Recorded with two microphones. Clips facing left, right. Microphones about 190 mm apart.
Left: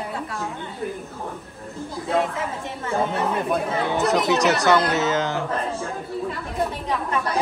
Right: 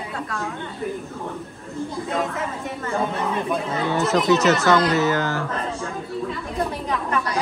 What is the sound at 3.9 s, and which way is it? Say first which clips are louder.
Speech: right 3 dB; 15° left (ahead or behind).